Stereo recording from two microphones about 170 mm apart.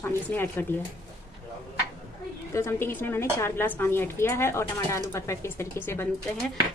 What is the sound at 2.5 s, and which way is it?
Speech, 15° left (ahead or behind).